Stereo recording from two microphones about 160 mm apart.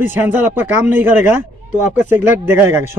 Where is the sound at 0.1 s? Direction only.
10° right (ahead or behind).